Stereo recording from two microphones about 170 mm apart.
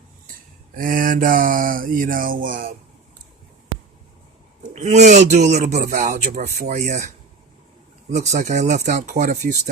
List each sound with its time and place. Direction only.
0.8 s mantra: 55° right (ahead or behind)
4.7 s speech: 45° right (ahead or behind)
8.1 s speech: 45° right (ahead or behind)